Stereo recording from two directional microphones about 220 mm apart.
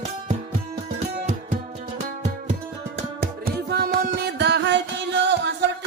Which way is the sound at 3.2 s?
45° right (ahead or behind).